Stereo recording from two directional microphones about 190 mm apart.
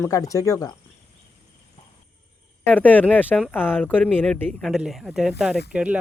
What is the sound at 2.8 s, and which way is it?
Speech, 10° left (ahead or behind).